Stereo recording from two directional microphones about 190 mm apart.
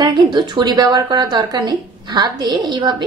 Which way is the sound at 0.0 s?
25° right (ahead or behind).